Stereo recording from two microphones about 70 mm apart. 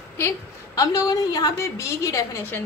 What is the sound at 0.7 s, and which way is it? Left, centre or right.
A woman's voice, left.